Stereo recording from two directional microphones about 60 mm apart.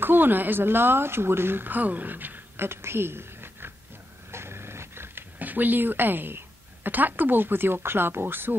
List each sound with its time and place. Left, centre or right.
0.0 s a woman's voice: right
4.3 s dog: right